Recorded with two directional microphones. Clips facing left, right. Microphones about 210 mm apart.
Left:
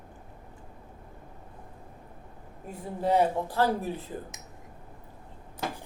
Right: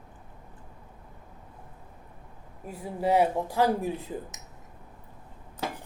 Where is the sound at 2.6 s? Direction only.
5° right (ahead or behind).